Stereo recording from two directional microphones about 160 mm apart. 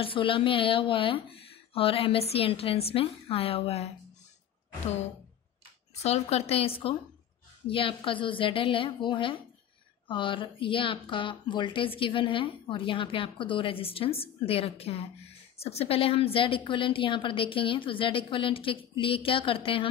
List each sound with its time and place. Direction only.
0.0 s speech: 35° left (ahead or behind)
6.0 s speech: 40° left (ahead or behind)